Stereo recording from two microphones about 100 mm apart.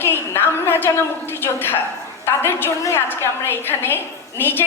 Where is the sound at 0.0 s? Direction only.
20° left (ahead or behind).